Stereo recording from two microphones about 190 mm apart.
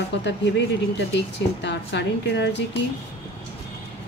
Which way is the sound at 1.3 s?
65° left (ahead or behind).